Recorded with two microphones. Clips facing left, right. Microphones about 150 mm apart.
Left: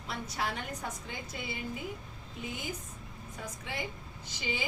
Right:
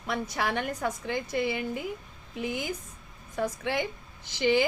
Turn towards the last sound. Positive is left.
turn(degrees=-80)